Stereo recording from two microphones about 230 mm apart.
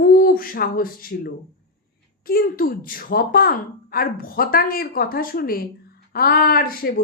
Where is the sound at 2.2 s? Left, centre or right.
Left.